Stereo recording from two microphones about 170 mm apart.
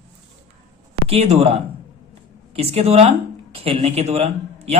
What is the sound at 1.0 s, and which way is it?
Speech, 40° right (ahead or behind).